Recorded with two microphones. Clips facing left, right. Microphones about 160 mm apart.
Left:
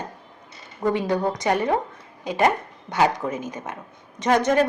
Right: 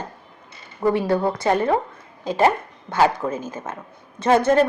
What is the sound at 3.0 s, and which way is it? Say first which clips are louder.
A woman's voice: right 2 dB; 15° left (ahead or behind).